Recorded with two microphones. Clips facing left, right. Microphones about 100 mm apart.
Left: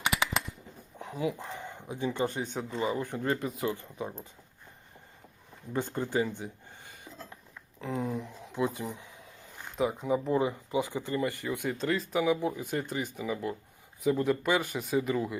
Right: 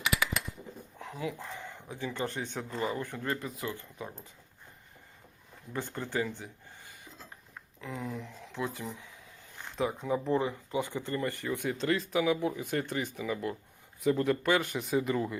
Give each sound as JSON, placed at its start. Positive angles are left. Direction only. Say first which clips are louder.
{"t": 0.0, "sound": "a sound", "louder": "left 2 dB", "side_deg": 30}
{"t": 1.2, "sound": "speech", "louder": "left 5 dB", "side_deg": 15}
{"t": 5.7, "sound": "speech", "louder": "left 4 dB", "side_deg": 20}
{"t": 7.8, "sound": "speech", "louder": "left 5 dB", "side_deg": 25}
{"t": 9.7, "sound": "speech", "louder": "left 2 dB", "side_deg": 10}
{"t": 11.7, "sound": "speech", "louder": "even", "side_deg": 0}